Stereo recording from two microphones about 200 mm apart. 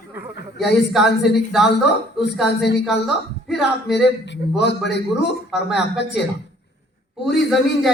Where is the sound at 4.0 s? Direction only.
60° left (ahead or behind).